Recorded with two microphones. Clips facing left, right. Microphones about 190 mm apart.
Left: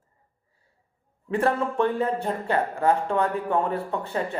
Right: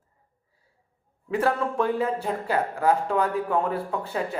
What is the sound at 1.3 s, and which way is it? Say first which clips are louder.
Speech: left 1 dB; centre (ahead or behind).